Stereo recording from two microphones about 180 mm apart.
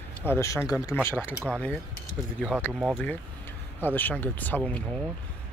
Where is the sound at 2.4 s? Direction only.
5° right (ahead or behind).